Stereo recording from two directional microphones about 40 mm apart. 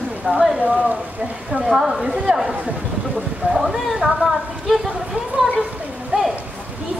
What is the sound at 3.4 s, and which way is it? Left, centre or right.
Speech, right.